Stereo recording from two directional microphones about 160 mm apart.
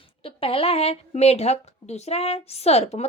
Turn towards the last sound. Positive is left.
turn(degrees=40)  # may be behind; listen again after turning